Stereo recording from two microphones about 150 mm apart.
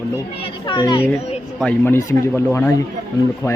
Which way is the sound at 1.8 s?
20° left (ahead or behind).